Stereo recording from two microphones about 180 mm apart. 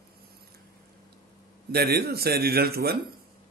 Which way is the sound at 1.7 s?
60° right (ahead or behind).